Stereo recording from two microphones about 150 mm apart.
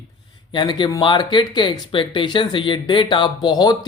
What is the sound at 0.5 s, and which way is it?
Speech, 30° left (ahead or behind).